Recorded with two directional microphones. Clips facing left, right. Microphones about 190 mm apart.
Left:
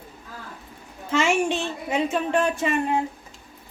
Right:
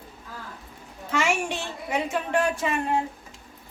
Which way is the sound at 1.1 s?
20° left (ahead or behind).